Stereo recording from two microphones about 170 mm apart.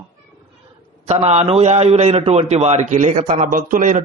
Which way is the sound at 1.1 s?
40° right (ahead or behind).